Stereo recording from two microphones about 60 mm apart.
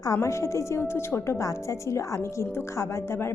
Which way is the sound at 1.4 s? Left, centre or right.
Left.